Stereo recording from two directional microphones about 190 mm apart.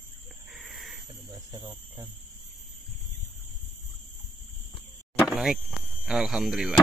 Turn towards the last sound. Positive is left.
turn(degrees=0)  # may be behind; listen again after turning